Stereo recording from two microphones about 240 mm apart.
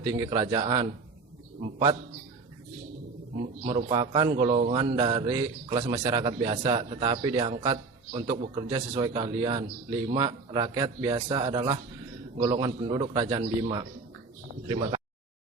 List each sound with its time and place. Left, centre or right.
0.1 s a man's voice: centre
3.3 s a man's voice: right